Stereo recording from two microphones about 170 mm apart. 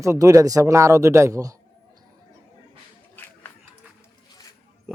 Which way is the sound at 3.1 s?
10° left (ahead or behind).